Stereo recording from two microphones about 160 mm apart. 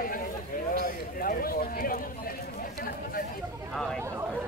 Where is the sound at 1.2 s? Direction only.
65° left (ahead or behind).